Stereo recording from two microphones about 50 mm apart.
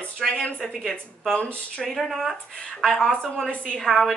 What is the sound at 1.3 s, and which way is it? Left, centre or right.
Speech, left.